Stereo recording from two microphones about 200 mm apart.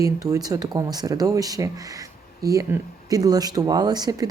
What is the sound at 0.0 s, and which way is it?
Speech, 15° right (ahead or behind).